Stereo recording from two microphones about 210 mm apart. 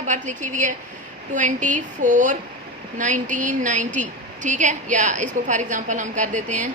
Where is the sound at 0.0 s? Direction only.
35° right (ahead or behind).